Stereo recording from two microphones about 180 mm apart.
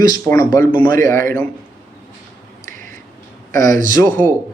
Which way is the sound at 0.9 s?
50° right (ahead or behind).